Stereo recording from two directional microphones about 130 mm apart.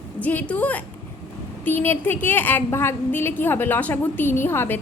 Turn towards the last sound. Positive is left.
turn(degrees=20)  # may be behind; listen again after turning